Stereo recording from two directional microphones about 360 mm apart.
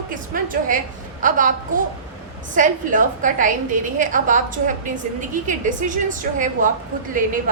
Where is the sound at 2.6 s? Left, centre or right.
Right.